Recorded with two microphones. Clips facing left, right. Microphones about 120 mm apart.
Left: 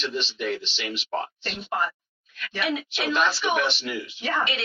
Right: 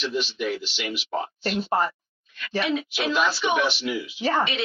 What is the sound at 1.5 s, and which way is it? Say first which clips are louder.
Speech: right 8 dB; 35° right (ahead or behind).